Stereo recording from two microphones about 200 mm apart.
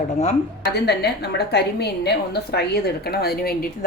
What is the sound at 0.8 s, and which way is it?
Speech, 55° left (ahead or behind).